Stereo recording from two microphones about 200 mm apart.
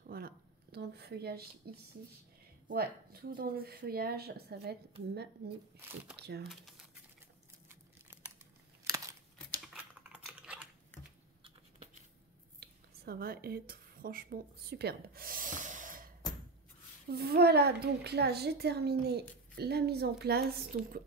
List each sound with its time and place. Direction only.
0.0 s a sound: 50° right (ahead or behind)
2.7 s a woman's voice: 50° right (ahead or behind)
5.8 s speech: 10° right (ahead or behind)
6.1 s speech: 55° right (ahead or behind)
8.8 s a sound: 15° right (ahead or behind)
10.1 s typing: 5° right (ahead or behind)
10.9 s typing: 10° left (ahead or behind)
12.5 s a sound: 50° right (ahead or behind)
17.1 s a woman's voice: 50° right (ahead or behind)